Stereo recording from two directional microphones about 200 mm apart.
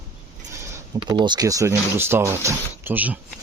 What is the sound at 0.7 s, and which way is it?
Speech, 20° right (ahead or behind).